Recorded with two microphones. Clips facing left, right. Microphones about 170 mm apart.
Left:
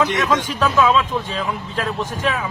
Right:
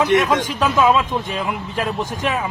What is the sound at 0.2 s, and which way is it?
A man's voice, 20° right (ahead or behind).